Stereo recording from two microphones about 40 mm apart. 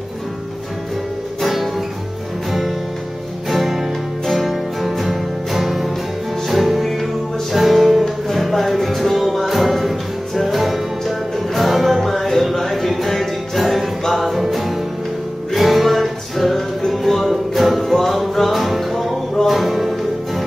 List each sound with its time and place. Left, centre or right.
1.4 s music: centre
3.4 s music: centre